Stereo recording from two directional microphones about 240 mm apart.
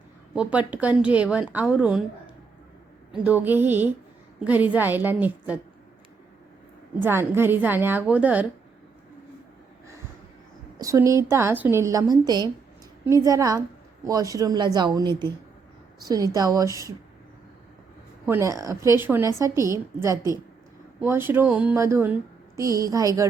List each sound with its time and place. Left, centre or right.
0.7 s a woman's voice: centre
3.1 s speech: centre
7.0 s speech: centre
10.8 s speech: centre
18.3 s speech: centre